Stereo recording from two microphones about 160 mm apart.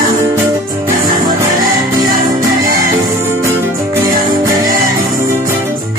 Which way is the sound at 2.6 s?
65° right (ahead or behind).